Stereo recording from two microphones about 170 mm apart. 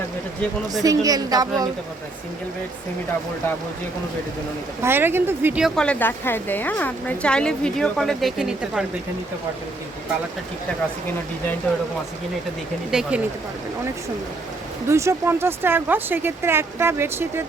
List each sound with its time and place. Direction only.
0.8 s speech: 20° right (ahead or behind)
4.8 s speech: 15° right (ahead or behind)
5.6 s speech: 5° left (ahead or behind)
12.9 s speech: 5° right (ahead or behind)
14.8 s speech: 15° right (ahead or behind)